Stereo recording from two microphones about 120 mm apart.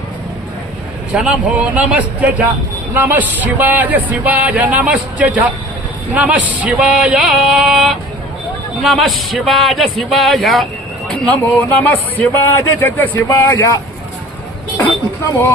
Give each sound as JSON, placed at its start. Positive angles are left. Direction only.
{"t": 1.1, "sound": "speech", "side_deg": -10}
{"t": 11.1, "sound": "a man's voice", "side_deg": 15}